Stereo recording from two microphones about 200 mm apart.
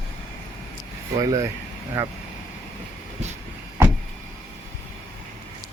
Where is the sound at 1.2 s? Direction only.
20° right (ahead or behind).